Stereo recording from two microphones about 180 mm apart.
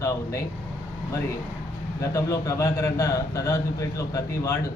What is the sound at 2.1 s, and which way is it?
A man's voice, 15° left (ahead or behind).